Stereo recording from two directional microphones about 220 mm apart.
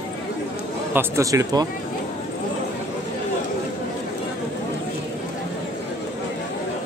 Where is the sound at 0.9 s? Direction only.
10° right (ahead or behind).